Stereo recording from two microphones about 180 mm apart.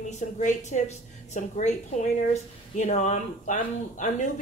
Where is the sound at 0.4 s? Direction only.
45° left (ahead or behind).